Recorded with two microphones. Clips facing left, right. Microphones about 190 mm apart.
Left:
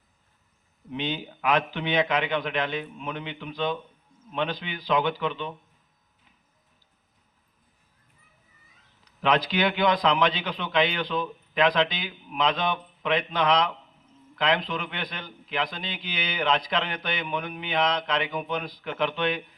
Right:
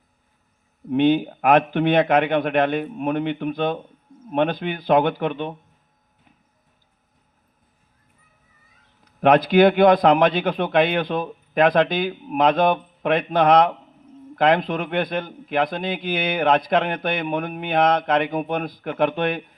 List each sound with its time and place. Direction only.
0.9 s a man's voice: 55° right (ahead or behind)
9.0 s a man's voice: 50° right (ahead or behind)